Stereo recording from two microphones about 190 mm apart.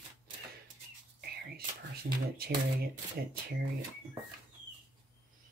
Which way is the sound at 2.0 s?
50° right (ahead or behind).